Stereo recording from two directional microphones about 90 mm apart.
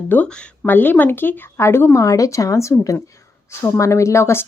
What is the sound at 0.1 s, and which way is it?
Speech, 15° left (ahead or behind).